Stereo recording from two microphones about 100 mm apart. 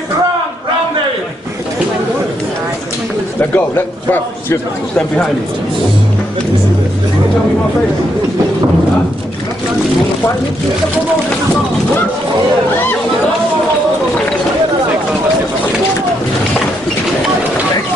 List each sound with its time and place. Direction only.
3.3 s a man's voice: 20° left (ahead or behind)